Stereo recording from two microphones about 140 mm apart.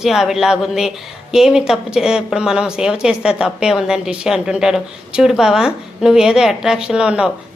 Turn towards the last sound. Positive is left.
turn(degrees=-5)  # may be behind; listen again after turning